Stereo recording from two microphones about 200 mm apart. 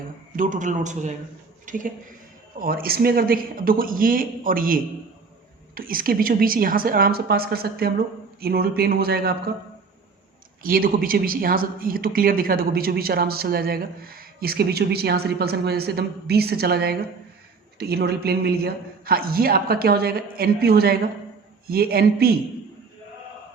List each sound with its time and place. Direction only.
0.3 s a man's voice: 40° right (ahead or behind)
1.6 s a sound: 40° right (ahead or behind)
2.6 s speech: 45° right (ahead or behind)
10.6 s speech: 45° right (ahead or behind)